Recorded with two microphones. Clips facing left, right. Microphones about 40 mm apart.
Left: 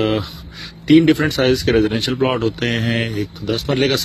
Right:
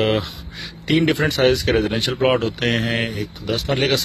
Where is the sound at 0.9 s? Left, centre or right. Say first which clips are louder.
Left 6 dB; centre.